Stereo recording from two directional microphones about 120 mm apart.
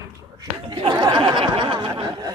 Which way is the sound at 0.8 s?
35° right (ahead or behind).